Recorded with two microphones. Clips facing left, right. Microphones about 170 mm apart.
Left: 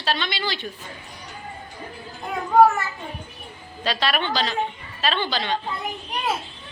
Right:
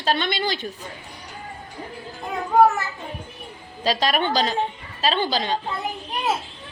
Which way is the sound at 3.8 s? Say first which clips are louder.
Right 3 dB; 40° right (ahead or behind).